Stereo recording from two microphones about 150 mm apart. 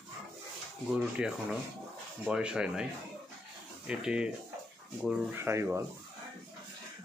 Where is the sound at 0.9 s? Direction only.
5° right (ahead or behind).